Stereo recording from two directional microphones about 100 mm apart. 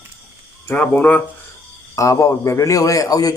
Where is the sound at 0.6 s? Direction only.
15° left (ahead or behind).